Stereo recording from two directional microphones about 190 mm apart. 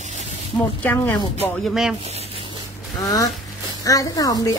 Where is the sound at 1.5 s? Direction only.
Centre (ahead or behind).